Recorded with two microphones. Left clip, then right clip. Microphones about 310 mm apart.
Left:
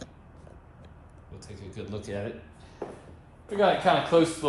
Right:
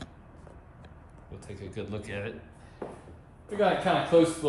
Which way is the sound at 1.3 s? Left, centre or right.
Centre.